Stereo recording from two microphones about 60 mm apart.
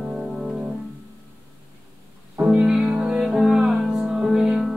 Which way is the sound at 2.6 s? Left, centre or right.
Centre.